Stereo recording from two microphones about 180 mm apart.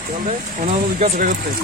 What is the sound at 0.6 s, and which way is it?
Speech, 40° right (ahead or behind).